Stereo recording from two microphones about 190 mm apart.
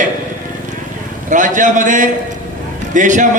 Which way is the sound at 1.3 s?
40° right (ahead or behind).